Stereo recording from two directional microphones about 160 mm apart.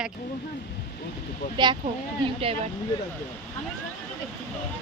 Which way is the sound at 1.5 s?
30° right (ahead or behind).